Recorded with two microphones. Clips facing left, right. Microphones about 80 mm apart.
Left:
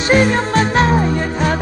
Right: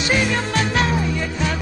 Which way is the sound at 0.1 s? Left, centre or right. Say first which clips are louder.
Left 8 dB; left.